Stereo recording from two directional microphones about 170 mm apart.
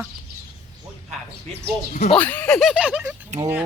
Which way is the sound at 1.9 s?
45° left (ahead or behind).